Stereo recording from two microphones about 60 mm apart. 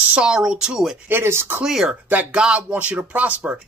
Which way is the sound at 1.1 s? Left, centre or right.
Right.